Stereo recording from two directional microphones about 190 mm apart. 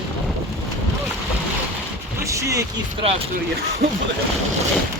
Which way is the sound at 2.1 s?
15° right (ahead or behind).